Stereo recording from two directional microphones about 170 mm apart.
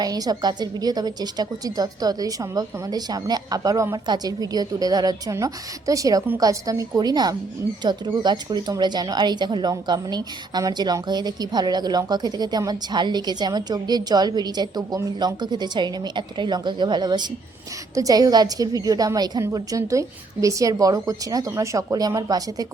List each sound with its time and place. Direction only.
0.0 s speech: 25° right (ahead or behind)